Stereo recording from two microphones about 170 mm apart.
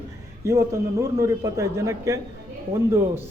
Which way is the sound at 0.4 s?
15° right (ahead or behind).